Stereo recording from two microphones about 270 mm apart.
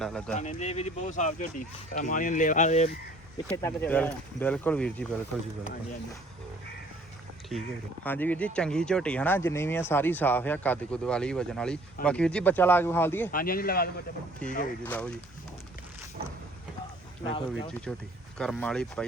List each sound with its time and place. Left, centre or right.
0.0 s speech: centre
0.3 s speech: left
3.4 s speech: centre
8.0 s speech: centre
13.3 s a man's voice: left
14.4 s speech: centre
17.2 s speech: centre
17.9 s speech: centre